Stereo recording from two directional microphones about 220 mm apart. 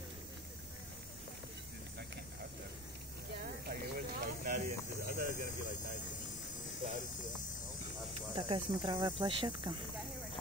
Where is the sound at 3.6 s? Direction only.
45° right (ahead or behind).